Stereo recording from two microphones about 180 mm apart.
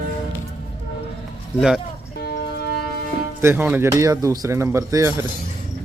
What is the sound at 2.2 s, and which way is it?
Music, 60° left (ahead or behind).